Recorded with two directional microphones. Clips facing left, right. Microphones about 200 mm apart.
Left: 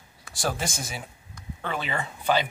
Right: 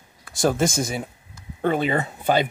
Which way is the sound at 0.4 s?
45° right (ahead or behind).